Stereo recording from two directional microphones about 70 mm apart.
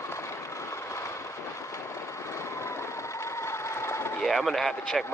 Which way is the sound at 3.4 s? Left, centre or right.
Left.